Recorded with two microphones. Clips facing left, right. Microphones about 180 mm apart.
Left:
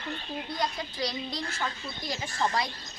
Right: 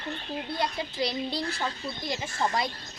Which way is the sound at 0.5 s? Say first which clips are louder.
Right 2 dB; 25° right (ahead or behind).